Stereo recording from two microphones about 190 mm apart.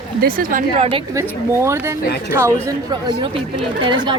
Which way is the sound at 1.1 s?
15° right (ahead or behind).